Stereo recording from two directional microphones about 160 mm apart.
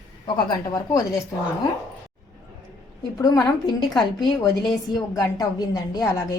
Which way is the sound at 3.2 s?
25° left (ahead or behind).